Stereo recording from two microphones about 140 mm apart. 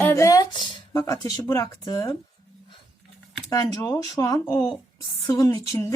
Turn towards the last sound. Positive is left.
turn(degrees=20)  # may be behind; listen again after turning